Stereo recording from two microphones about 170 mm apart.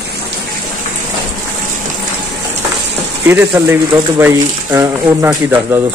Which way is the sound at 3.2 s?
15° right (ahead or behind).